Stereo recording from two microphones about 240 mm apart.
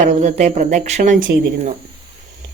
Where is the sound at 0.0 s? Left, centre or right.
Right.